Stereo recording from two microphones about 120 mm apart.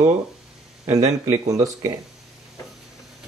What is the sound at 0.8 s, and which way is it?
Speech, 25° right (ahead or behind).